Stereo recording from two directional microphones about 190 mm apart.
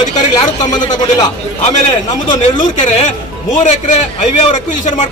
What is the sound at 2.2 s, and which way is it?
Speech, 40° left (ahead or behind).